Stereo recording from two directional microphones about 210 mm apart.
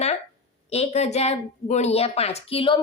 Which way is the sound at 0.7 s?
30° left (ahead or behind).